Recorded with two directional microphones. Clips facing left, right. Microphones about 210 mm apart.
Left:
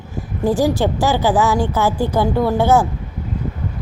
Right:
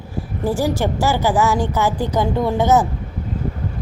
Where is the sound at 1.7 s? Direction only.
15° right (ahead or behind).